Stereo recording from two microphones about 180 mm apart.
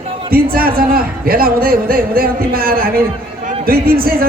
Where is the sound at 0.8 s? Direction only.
55° right (ahead or behind).